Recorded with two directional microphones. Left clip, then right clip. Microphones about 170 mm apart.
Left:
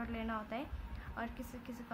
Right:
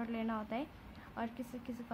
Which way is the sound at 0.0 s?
15° right (ahead or behind).